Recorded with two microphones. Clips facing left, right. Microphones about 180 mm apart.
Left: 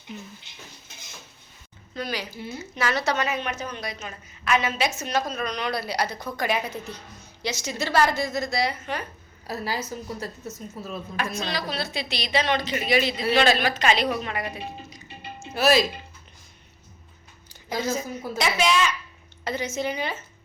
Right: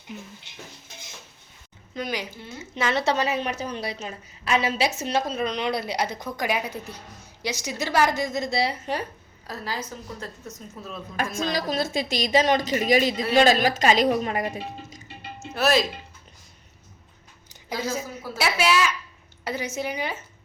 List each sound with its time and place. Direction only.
1.9 s a woman's voice: 20° right (ahead or behind); by 9.0 s 35° right (ahead or behind)
9.5 s a woman's voice: 10° left (ahead or behind)
11.2 s a woman's voice: 45° right (ahead or behind)
15.5 s speech: centre (ahead or behind)
17.7 s a woman's voice: 10° right (ahead or behind)